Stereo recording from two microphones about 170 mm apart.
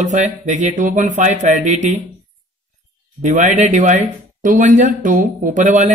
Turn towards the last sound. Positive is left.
turn(degrees=-45)  # may be behind; listen again after turning